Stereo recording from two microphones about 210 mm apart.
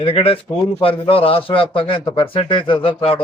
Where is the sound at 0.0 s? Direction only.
25° left (ahead or behind).